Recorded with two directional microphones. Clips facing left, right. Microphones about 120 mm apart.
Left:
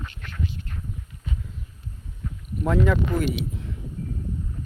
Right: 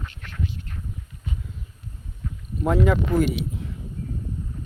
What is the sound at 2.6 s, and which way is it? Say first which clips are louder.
Speech: right 2 dB; 20° right (ahead or behind).